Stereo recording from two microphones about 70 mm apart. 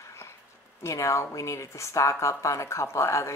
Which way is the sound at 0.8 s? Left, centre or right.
Left.